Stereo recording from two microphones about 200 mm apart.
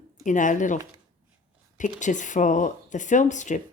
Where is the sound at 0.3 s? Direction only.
40° left (ahead or behind).